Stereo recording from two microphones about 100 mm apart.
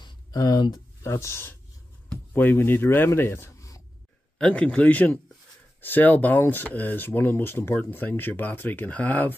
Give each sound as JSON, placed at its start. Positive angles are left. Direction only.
{"t": 0.0, "sound": "a sound", "side_deg": 45}
{"t": 1.0, "sound": "speech", "side_deg": 30}
{"t": 4.4, "sound": "speech", "side_deg": 10}